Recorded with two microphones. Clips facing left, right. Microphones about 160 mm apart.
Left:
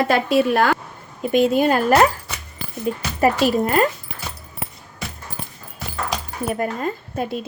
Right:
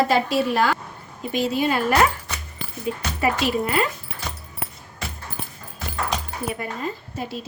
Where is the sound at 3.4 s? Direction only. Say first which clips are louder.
Left 5 dB; 45° left (ahead or behind).